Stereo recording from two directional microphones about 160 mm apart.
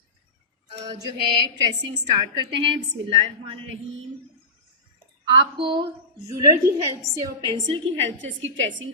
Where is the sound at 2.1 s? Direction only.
30° right (ahead or behind).